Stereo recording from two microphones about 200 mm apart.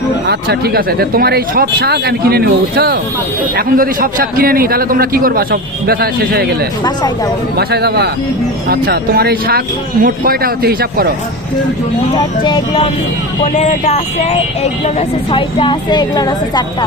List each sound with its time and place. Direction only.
0.3 s a man's voice: 50° right (ahead or behind)
7.5 s a man's voice: 55° right (ahead or behind)
12.1 s a woman's voice: 20° left (ahead or behind)
13.4 s speech: 35° left (ahead or behind)
15.3 s a woman's voice: 25° left (ahead or behind)